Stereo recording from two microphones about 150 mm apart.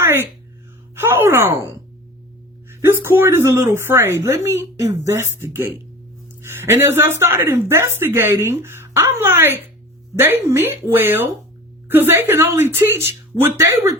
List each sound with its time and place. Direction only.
0.0 s a sound: 15° right (ahead or behind)
0.9 s speech: 15° right (ahead or behind)
2.6 s speech: 15° right (ahead or behind)